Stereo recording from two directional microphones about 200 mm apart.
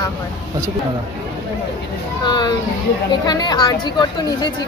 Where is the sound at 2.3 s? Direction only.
20° left (ahead or behind).